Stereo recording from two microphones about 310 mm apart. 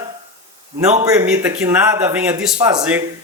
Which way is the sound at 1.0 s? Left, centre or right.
Centre.